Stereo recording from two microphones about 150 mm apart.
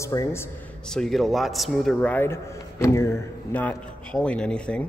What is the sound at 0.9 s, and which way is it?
A man's voice, centre (ahead or behind).